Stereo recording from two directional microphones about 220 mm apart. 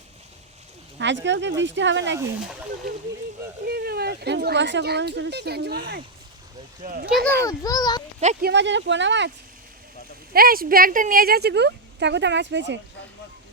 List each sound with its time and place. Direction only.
0.9 s speech: 55° right (ahead or behind)
3.7 s speech: 45° right (ahead or behind)
7.4 s a child's voice: 15° left (ahead or behind)
8.2 s speech: 30° right (ahead or behind)
8.4 s speech: 55° right (ahead or behind)
10.3 s speech: 40° right (ahead or behind)